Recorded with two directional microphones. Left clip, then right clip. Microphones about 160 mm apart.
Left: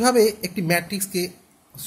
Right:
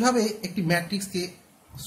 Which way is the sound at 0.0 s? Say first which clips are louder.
Left 6 dB; 45° left (ahead or behind).